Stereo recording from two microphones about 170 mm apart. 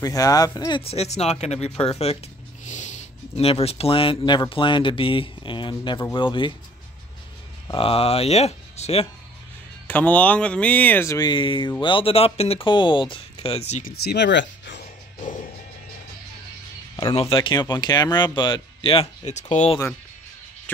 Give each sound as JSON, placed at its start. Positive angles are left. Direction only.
{"t": 0.0, "sound": "speech", "side_deg": 20}
{"t": 2.6, "sound": "a sound", "side_deg": 45}
{"t": 4.2, "sound": "speech", "side_deg": 25}
{"t": 7.7, "sound": "speech", "side_deg": 35}
{"t": 9.8, "sound": "speech", "side_deg": 10}
{"t": 13.8, "sound": "speech", "side_deg": 80}
{"t": 17.1, "sound": "speech", "side_deg": 35}